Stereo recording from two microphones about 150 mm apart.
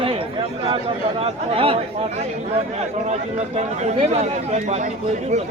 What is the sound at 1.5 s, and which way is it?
Speech, 40° right (ahead or behind).